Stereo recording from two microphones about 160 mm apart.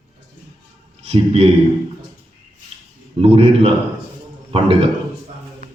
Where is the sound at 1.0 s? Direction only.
40° right (ahead or behind).